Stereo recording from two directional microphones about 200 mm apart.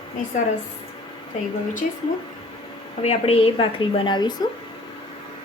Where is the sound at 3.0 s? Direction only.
30° left (ahead or behind).